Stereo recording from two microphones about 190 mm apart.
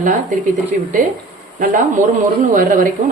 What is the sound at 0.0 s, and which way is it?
Speech, 45° right (ahead or behind).